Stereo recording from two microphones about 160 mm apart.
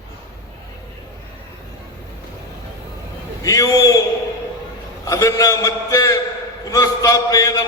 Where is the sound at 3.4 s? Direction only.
20° left (ahead or behind).